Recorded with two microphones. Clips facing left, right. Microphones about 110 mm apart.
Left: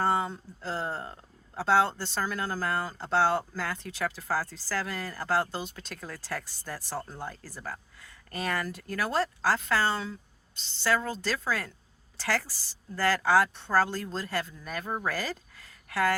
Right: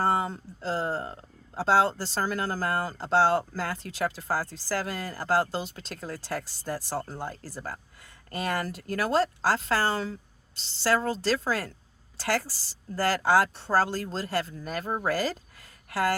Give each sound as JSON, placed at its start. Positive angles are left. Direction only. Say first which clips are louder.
{"t": 0.0, "sound": "a woman's voice", "louder": "right 1 dB", "side_deg": -35}